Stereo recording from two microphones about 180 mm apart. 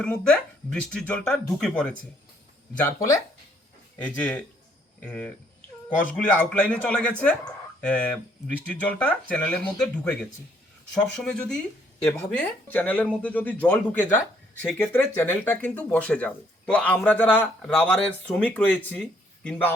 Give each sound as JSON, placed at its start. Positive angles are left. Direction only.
{"t": 0.0, "sound": "speech", "side_deg": 5}
{"t": 2.7, "sound": "speech", "side_deg": 15}
{"t": 6.3, "sound": "speech", "side_deg": 10}